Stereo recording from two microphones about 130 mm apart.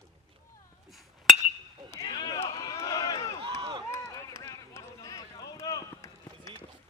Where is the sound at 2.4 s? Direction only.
50° left (ahead or behind).